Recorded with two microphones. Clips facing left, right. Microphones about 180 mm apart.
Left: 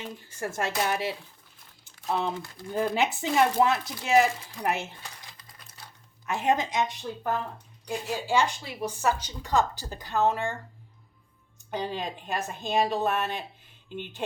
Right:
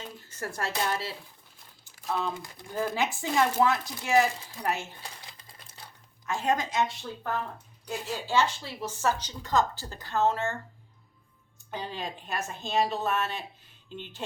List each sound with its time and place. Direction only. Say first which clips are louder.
0.3 s speech: left 3 dB; 15° left (ahead or behind)
1.8 s crumpling: left 2 dB; 20° left (ahead or behind)
2.7 s speech: left 3 dB; 20° left (ahead or behind)
5.4 s typewriter: even; 25° right (ahead or behind)
6.2 s speech: left 2 dB; 20° left (ahead or behind)
11.7 s speech: left 4 dB; 15° left (ahead or behind)